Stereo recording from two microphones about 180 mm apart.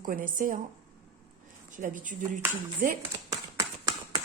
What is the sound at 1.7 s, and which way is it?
Speech, 45° right (ahead or behind).